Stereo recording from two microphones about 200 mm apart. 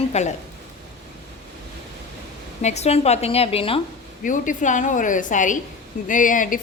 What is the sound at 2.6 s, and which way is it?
A woman's voice, 35° left (ahead or behind).